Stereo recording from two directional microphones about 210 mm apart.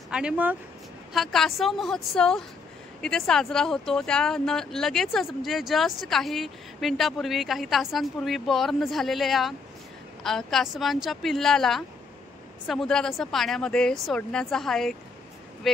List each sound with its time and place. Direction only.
0.1 s speech: 5° right (ahead or behind)